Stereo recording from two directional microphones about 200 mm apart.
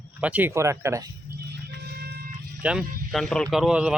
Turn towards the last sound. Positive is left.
turn(degrees=-5)  # may be behind; listen again after turning